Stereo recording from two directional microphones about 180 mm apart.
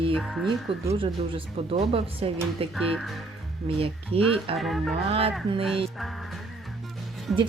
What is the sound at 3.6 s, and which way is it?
Speech, 30° right (ahead or behind).